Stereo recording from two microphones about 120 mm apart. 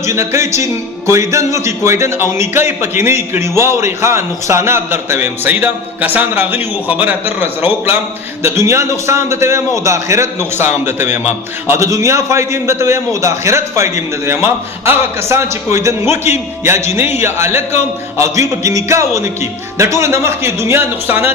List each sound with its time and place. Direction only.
0.0 s a man's voice: 25° right (ahead or behind)